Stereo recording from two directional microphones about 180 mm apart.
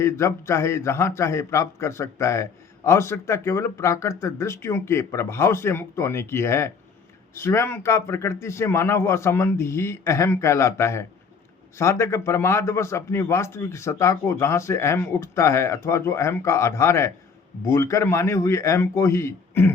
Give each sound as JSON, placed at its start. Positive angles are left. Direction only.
{"t": 0.0, "sound": "a man's voice", "side_deg": 15}